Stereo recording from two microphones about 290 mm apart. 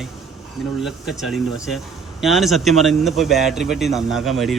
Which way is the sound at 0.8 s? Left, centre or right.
Centre.